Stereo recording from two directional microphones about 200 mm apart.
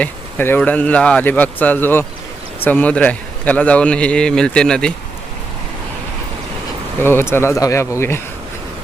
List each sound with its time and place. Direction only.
0.0 s a man's voice: 10° left (ahead or behind)
7.0 s speech: 10° left (ahead or behind)